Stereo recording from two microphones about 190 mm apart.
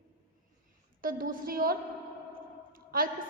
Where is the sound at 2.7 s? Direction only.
50° right (ahead or behind).